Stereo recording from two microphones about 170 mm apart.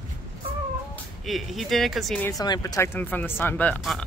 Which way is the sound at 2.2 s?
20° left (ahead or behind).